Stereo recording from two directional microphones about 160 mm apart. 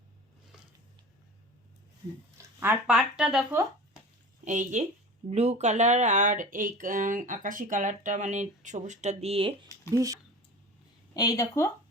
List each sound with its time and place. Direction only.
2.4 s speech: 15° right (ahead or behind)
4.4 s speech: 50° right (ahead or behind); by 9.6 s 35° right (ahead or behind)
9.9 s speech: 20° right (ahead or behind)
11.1 s speech: 25° left (ahead or behind)